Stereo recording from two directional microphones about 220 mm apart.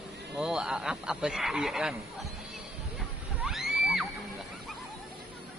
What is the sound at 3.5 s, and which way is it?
Music, centre (ahead or behind).